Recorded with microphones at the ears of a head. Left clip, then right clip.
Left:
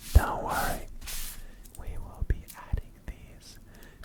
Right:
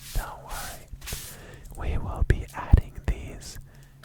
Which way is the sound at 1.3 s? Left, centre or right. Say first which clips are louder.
Right 10 dB; right.